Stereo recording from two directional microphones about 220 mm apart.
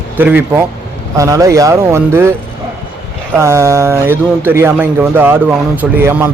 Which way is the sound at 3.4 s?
10° right (ahead or behind).